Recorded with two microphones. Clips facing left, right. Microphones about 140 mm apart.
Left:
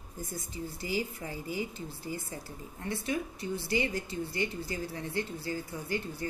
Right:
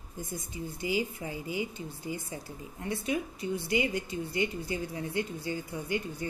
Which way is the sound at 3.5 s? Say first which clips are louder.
Right 2 dB; 35° left (ahead or behind).